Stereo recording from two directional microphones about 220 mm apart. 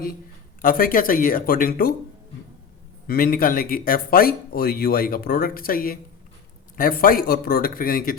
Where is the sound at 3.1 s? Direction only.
40° left (ahead or behind).